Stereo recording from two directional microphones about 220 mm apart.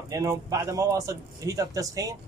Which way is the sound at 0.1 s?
15° right (ahead or behind).